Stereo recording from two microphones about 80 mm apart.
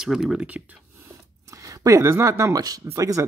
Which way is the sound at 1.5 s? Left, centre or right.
Right.